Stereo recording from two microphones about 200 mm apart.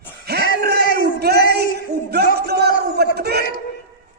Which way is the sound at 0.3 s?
50° right (ahead or behind).